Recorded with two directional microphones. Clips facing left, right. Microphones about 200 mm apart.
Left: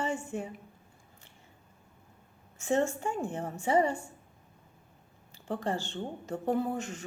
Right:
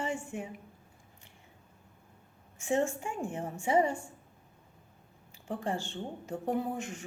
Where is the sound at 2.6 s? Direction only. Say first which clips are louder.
Left 1 dB; 15° right (ahead or behind).